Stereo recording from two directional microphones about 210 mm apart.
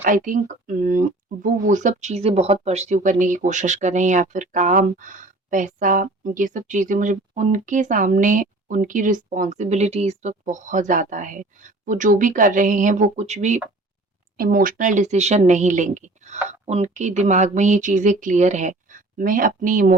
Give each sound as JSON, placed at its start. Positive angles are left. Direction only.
{"t": 0.0, "sound": "speech", "side_deg": -40}